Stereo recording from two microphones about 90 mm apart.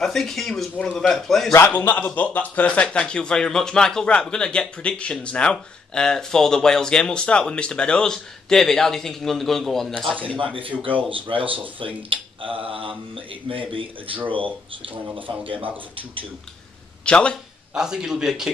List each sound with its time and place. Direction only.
0.0 s a man's voice: 5° left (ahead or behind)
1.7 s a man's voice: 15° left (ahead or behind)
10.3 s speech: 75° right (ahead or behind)
17.0 s a man's voice: 10° left (ahead or behind)
17.7 s a man's voice: 5° right (ahead or behind)